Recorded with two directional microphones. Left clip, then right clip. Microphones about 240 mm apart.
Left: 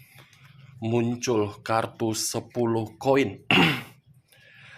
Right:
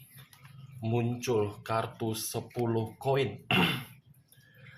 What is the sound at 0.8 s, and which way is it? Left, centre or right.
Speech, left.